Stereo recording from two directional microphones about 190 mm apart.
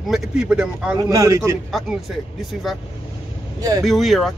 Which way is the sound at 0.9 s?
15° right (ahead or behind).